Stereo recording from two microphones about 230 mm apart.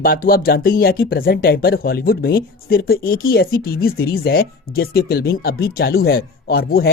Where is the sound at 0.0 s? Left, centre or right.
Left.